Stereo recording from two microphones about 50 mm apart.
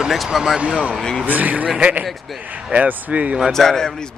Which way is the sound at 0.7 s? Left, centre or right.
Centre.